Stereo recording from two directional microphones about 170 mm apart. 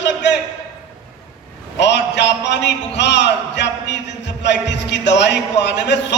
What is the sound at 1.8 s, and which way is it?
A man's voice, 90° left.